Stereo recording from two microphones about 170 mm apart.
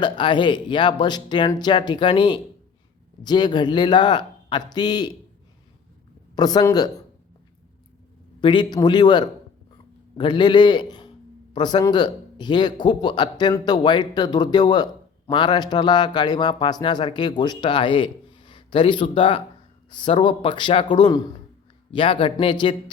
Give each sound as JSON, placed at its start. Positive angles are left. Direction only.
{"t": 0.0, "sound": "a man's voice", "side_deg": 25}
{"t": 6.3, "sound": "a man's voice", "side_deg": 25}
{"t": 8.4, "sound": "a man's voice", "side_deg": 25}